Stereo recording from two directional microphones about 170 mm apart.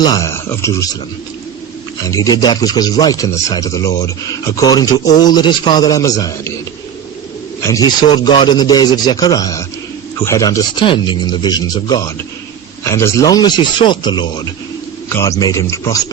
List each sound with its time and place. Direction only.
0.0 s speech: 20° left (ahead or behind)
2.0 s speech: 20° left (ahead or behind)
7.7 s speech: 25° left (ahead or behind)